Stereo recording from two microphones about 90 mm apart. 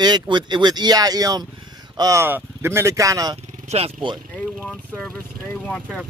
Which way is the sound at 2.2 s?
25° right (ahead or behind).